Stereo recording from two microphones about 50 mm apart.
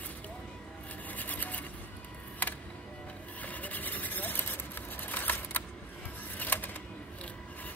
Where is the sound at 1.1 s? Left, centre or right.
Left.